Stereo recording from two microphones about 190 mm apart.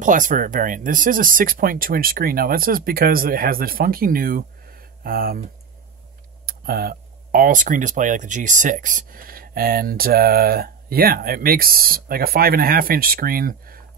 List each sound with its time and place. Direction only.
0.0 s speech: 45° right (ahead or behind)
6.4 s speech: 50° right (ahead or behind)